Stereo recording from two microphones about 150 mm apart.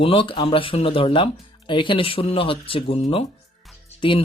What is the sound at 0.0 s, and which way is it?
Speech, 35° left (ahead or behind).